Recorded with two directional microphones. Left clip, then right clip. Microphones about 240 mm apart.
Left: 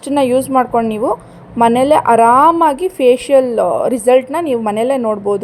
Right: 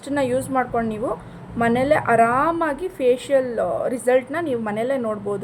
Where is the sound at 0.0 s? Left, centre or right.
Left.